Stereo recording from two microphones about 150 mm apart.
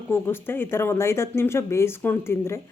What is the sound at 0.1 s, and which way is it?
Speech, 15° left (ahead or behind).